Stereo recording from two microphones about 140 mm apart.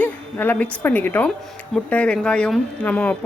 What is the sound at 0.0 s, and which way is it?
A woman's voice, 10° left (ahead or behind).